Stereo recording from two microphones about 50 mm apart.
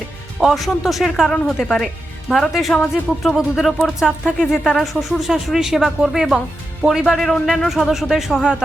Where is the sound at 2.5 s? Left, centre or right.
Centre.